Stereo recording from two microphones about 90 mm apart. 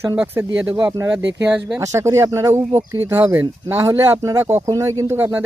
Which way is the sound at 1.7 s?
35° right (ahead or behind).